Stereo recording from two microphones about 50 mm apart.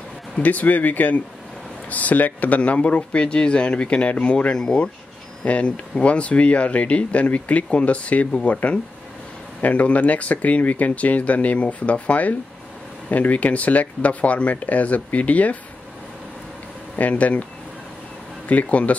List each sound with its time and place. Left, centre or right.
0.4 s speech: left
9.6 s speech: left
16.9 s speech: left
18.5 s speech: left